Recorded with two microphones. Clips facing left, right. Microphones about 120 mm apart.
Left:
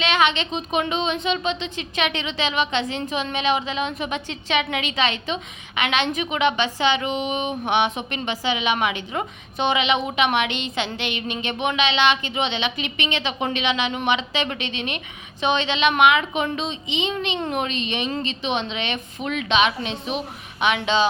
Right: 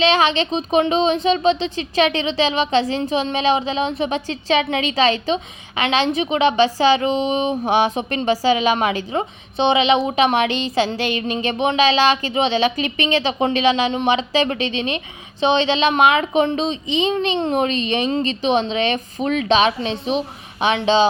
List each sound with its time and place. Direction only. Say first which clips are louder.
0.0 s speech: right 4 dB; 30° right (ahead or behind)